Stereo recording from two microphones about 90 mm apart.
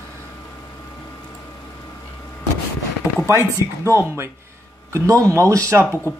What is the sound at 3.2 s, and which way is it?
Speech, 30° right (ahead or behind).